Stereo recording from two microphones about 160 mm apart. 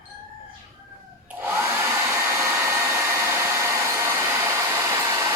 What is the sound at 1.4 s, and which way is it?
Hair dryer, 15° right (ahead or behind).